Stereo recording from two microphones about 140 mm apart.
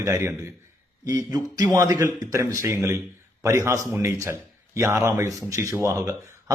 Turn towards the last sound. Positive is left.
turn(degrees=-20)  # may be behind; listen again after turning